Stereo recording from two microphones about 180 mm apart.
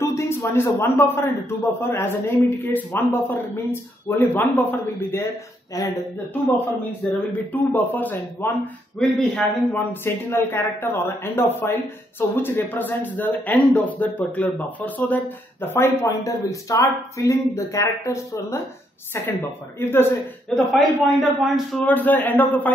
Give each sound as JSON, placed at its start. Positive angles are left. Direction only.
{"t": 0.0, "sound": "a man's voice", "side_deg": 15}
{"t": 7.0, "sound": "a man's voice", "side_deg": 5}
{"t": 10.0, "sound": "a man's voice", "side_deg": 10}
{"t": 19.8, "sound": "a man's voice", "side_deg": 15}
{"t": 20.5, "sound": "a man's voice", "side_deg": 0}